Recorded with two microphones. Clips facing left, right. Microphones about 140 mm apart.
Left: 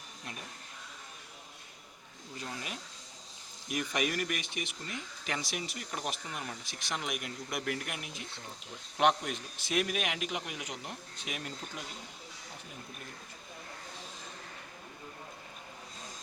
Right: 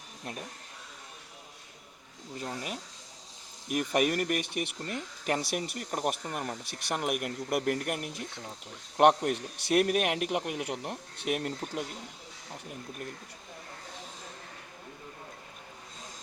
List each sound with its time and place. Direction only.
2.4 s a man's voice: 45° right (ahead or behind)